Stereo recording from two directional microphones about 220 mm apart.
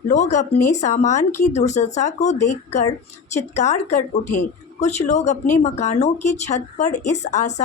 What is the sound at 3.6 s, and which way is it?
Speech, 30° left (ahead or behind).